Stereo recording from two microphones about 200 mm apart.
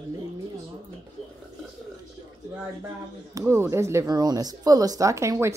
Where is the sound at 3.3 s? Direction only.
15° right (ahead or behind).